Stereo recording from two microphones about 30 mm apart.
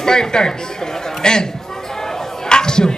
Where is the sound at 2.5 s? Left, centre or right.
Left.